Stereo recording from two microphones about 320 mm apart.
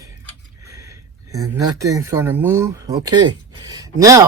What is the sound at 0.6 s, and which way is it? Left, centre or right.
Speech, centre.